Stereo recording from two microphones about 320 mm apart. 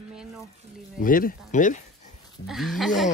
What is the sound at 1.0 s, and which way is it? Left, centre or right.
Speech, left.